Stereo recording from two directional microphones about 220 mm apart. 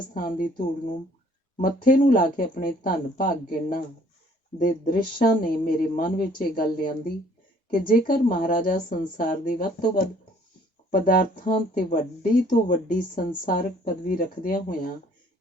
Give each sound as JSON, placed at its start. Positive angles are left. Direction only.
{"t": 0.1, "sound": "speech", "side_deg": 40}